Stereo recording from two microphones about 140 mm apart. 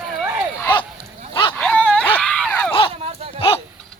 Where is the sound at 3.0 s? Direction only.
45° right (ahead or behind).